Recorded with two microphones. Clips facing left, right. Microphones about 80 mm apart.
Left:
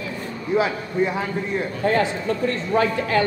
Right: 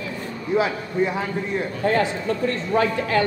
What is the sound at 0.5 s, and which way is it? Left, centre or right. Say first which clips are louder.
A man's voice: even; left.